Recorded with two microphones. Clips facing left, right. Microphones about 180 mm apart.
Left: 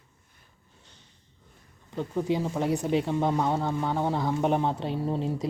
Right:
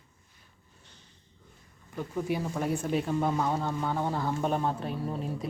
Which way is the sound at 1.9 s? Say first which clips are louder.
Left 4 dB; 20° left (ahead or behind).